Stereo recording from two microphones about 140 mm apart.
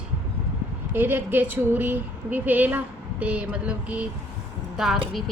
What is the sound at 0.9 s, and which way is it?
A woman's voice, 15° right (ahead or behind).